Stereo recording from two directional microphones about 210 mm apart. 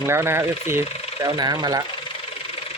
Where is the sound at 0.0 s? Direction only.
10° right (ahead or behind).